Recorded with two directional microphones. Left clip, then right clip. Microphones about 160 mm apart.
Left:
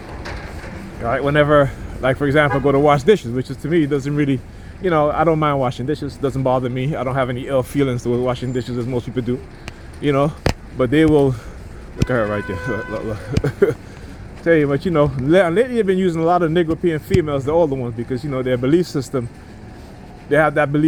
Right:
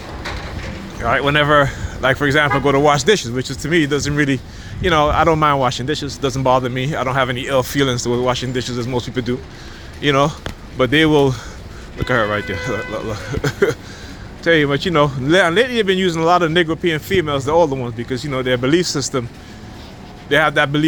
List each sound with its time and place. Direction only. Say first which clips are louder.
1.0 s speech: right 1 dB; 60° left (ahead or behind)
20.3 s speech: right 1 dB; 65° left (ahead or behind)